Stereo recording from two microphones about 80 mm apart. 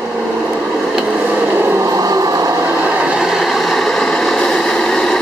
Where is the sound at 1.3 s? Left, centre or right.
Right.